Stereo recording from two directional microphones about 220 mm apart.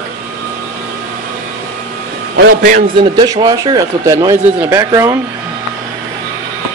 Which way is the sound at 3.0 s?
20° right (ahead or behind).